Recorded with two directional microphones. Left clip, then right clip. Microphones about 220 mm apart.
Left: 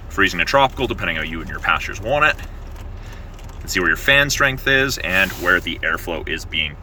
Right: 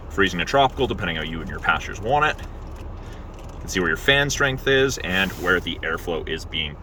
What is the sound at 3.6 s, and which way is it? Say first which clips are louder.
Speech: left 4 dB; 10° right (ahead or behind).